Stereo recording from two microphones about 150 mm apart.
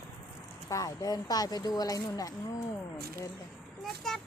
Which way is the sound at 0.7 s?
25° left (ahead or behind).